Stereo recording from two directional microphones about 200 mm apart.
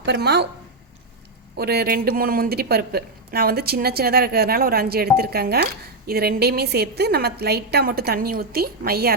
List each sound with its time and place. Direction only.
0.0 s speech: 55° right (ahead or behind)
1.5 s speech: 50° right (ahead or behind)